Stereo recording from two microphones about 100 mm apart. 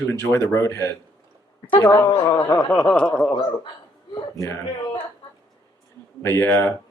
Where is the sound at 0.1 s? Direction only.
25° left (ahead or behind).